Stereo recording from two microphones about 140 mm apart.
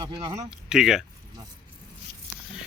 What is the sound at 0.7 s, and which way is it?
Speech, 5° right (ahead or behind).